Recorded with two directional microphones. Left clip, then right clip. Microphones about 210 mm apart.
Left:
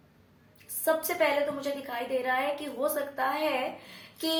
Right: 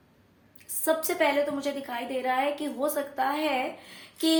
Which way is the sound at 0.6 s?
40° right (ahead or behind).